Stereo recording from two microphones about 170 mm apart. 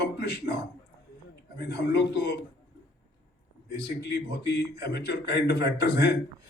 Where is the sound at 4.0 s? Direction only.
75° left (ahead or behind).